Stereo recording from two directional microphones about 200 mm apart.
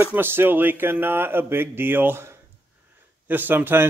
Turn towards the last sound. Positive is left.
turn(degrees=-10)  # may be behind; listen again after turning